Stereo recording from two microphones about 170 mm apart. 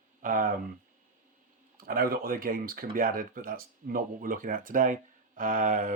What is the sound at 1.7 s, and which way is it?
Speech, 60° right (ahead or behind).